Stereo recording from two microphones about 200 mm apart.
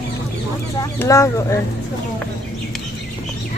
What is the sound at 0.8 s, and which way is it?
Speech, 15° left (ahead or behind).